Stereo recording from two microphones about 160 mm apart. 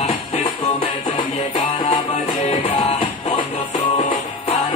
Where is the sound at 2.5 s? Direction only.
30° left (ahead or behind).